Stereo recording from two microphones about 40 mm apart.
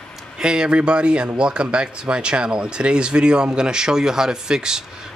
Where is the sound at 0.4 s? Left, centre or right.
Right.